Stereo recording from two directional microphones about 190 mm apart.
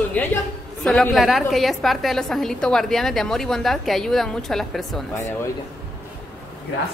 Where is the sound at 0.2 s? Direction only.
10° left (ahead or behind).